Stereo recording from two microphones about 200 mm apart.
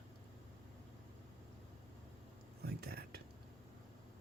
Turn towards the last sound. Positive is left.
turn(degrees=-50)  # may be behind; listen again after turning